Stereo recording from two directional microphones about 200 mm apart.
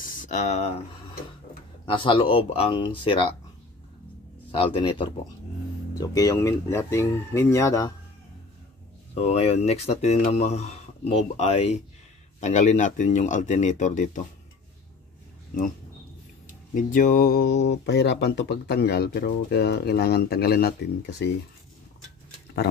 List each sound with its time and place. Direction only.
0.0 s speech: 40° left (ahead or behind)
1.9 s speech: 25° left (ahead or behind)
4.7 s speech: 25° left (ahead or behind)
9.1 s speech: 30° left (ahead or behind)
16.7 s speech: 40° left (ahead or behind)